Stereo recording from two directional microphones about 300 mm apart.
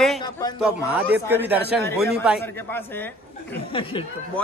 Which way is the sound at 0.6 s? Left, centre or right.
Centre.